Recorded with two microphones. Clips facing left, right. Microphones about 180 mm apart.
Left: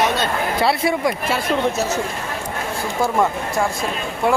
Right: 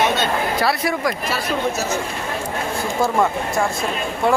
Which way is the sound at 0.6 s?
25° left (ahead or behind).